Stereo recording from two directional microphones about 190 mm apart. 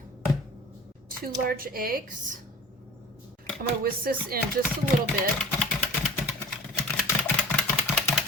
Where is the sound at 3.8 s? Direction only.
50° right (ahead or behind).